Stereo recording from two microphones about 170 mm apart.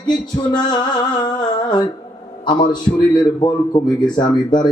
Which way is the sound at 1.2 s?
25° left (ahead or behind).